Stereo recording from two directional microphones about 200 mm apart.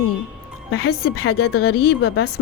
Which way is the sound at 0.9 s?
50° left (ahead or behind).